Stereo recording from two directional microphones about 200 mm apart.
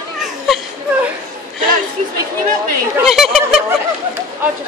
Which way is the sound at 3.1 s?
Centre (ahead or behind).